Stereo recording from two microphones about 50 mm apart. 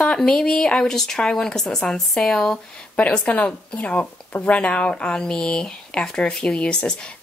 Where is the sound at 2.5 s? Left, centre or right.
Left.